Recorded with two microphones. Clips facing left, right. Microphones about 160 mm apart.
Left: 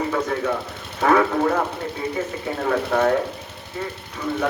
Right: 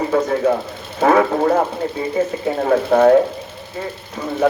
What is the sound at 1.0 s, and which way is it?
Speech, 35° right (ahead or behind).